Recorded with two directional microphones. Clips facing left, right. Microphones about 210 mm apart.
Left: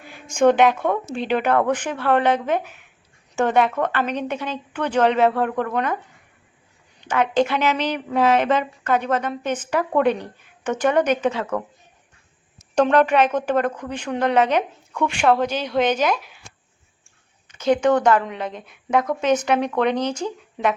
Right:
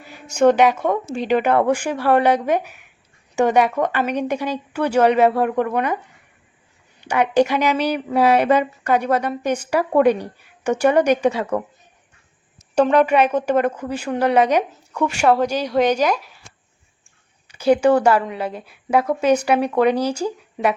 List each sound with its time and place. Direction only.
0.3 s speech: 10° right (ahead or behind)
7.0 s speech: 10° right (ahead or behind)
12.7 s speech: 10° right (ahead or behind)
17.5 s speech: 10° right (ahead or behind)